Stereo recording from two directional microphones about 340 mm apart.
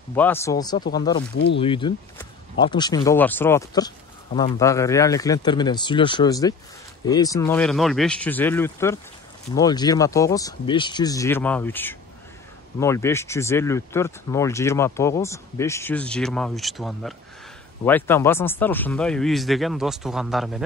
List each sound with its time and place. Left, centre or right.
0.1 s speech: centre
1.3 s speech: left
1.6 s speech: centre